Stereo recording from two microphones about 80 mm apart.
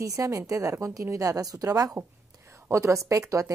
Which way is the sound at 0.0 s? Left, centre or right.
Right.